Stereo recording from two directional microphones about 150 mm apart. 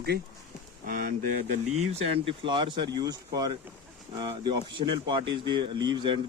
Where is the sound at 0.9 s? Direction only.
85° right.